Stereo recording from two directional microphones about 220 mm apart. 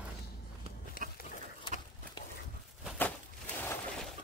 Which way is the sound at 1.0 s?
35° right (ahead or behind).